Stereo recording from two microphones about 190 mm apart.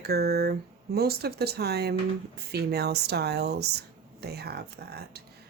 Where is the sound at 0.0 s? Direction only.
55° right (ahead or behind).